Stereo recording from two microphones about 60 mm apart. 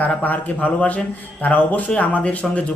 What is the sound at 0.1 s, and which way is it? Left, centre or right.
A man's voice, left.